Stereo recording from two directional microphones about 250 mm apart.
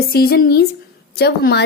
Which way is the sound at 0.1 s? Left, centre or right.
Left.